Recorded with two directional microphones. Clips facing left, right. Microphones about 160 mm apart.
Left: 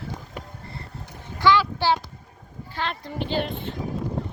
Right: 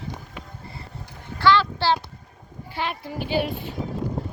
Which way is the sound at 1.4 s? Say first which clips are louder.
Even; 15° left (ahead or behind).